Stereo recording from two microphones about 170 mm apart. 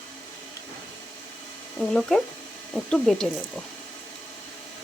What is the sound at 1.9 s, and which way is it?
Speech, 5° left (ahead or behind).